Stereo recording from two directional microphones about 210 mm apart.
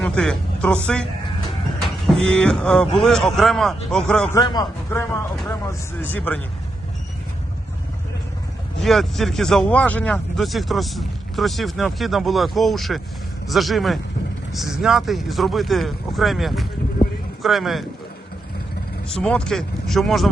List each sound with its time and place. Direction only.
0.0 s a man's voice: 5° left (ahead or behind)
2.0 s speech: 5° left (ahead or behind)
4.4 s speech: 20° left (ahead or behind)
8.8 s speech: centre (ahead or behind)
19.0 s speech: 5° left (ahead or behind)